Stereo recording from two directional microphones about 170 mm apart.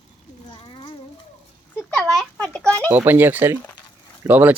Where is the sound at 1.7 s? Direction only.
5° left (ahead or behind).